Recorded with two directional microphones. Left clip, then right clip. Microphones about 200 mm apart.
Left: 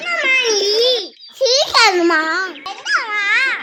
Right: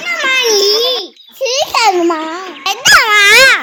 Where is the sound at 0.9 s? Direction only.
5° right (ahead or behind).